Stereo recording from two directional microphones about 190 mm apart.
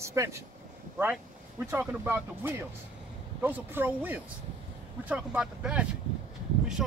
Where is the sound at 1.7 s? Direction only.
10° right (ahead or behind).